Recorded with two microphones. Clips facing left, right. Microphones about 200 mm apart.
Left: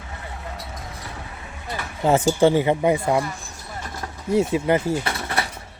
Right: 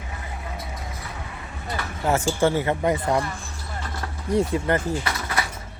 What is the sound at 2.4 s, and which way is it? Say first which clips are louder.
Speech: left 4 dB; 15° left (ahead or behind).